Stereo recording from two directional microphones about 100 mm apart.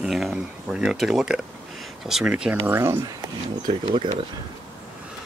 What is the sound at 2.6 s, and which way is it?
Speech, 25° right (ahead or behind).